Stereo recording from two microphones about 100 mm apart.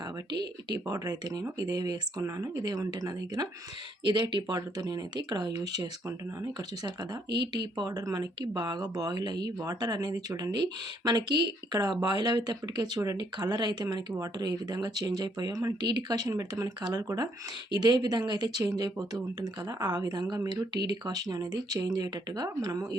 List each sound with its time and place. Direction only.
0.3 s speech: 45° right (ahead or behind)